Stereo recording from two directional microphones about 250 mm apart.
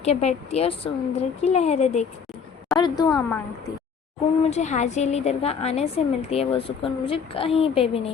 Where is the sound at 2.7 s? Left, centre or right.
Centre.